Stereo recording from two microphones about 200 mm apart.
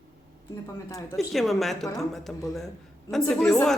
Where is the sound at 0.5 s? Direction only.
15° left (ahead or behind).